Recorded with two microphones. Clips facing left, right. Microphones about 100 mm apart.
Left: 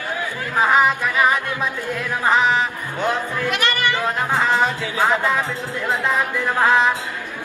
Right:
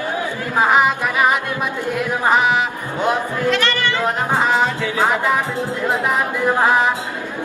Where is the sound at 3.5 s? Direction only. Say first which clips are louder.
Right 3 dB; 15° left (ahead or behind).